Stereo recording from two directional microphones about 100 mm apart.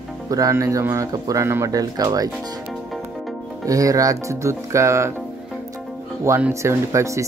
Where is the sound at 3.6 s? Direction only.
35° right (ahead or behind).